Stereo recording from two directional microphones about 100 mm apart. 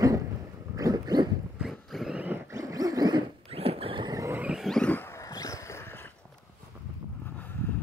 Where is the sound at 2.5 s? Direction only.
35° right (ahead or behind).